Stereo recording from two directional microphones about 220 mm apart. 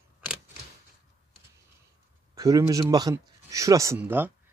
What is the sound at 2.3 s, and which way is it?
Speech, 15° right (ahead or behind).